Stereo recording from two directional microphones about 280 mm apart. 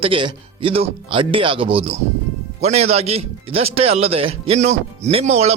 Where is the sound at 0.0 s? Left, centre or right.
Centre.